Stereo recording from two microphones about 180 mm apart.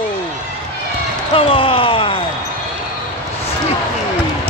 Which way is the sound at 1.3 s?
30° left (ahead or behind).